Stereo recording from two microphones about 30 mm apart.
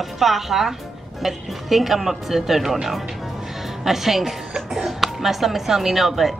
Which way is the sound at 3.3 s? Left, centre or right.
Centre.